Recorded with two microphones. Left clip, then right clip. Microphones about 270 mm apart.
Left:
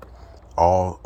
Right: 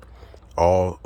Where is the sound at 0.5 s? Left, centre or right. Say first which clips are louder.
Left 1 dB; centre.